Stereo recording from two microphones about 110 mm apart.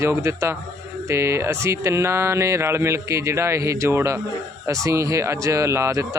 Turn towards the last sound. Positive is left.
turn(degrees=-25)  # may be behind; listen again after turning